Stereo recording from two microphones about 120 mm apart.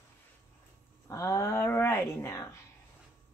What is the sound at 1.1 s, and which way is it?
Speech, 25° left (ahead or behind).